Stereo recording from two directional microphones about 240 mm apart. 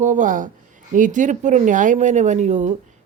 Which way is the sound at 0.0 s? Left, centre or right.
Right.